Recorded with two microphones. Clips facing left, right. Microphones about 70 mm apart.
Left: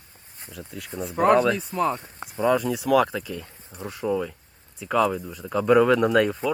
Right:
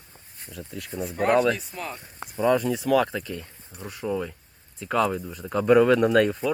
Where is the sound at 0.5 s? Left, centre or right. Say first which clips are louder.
Right 1 dB; centre.